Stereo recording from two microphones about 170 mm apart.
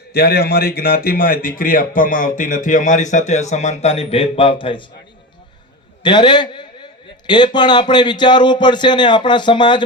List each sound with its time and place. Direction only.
0.1 s a man's voice: 70° left (ahead or behind); by 4.9 s 30° left (ahead or behind)
6.0 s speech: 25° left (ahead or behind)